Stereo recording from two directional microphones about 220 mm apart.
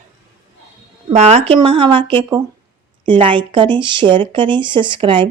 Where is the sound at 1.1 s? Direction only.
30° right (ahead or behind).